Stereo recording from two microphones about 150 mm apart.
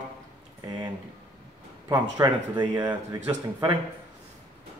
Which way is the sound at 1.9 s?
25° right (ahead or behind).